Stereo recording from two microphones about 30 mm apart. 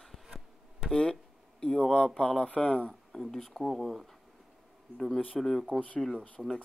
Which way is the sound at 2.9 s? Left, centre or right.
Centre.